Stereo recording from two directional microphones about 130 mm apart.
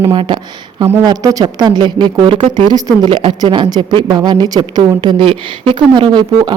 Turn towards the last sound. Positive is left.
turn(degrees=-35)  # may be behind; listen again after turning